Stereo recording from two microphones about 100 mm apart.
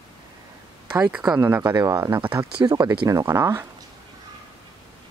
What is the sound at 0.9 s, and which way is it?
Speech, 10° right (ahead or behind).